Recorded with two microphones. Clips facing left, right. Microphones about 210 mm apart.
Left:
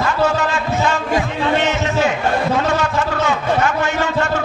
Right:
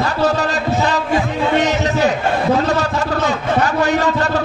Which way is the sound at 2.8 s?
35° right (ahead or behind).